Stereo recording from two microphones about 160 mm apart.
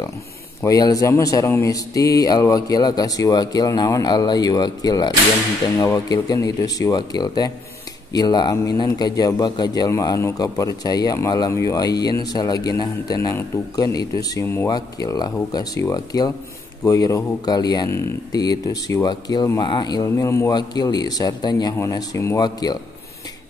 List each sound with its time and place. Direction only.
0.6 s a man's voice: 20° left (ahead or behind)